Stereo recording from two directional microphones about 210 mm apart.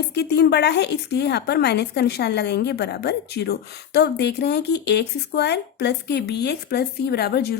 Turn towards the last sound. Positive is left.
turn(degrees=50)  # may be behind; listen again after turning